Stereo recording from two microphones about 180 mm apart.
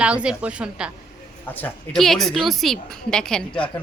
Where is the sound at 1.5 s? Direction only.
5° left (ahead or behind).